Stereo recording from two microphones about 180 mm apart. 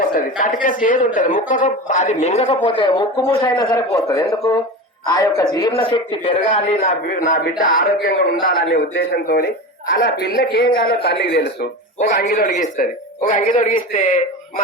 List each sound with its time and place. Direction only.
0.0 s speech: 50° left (ahead or behind); by 6.3 s 25° left (ahead or behind)
6.5 s speech: 40° left (ahead or behind); by 11.7 s 60° left (ahead or behind)
12.2 s speech: 45° left (ahead or behind)